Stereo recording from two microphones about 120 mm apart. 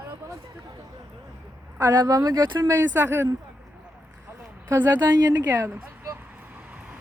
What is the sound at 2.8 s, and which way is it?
Speech, 20° right (ahead or behind).